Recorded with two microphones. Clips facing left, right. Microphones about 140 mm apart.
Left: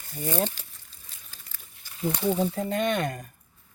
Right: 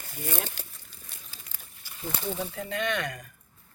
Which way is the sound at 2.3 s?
40° left (ahead or behind).